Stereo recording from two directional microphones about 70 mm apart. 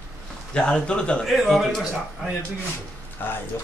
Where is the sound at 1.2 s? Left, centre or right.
Centre.